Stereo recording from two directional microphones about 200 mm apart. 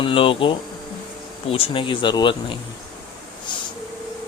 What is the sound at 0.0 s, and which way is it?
Speech, 25° left (ahead or behind).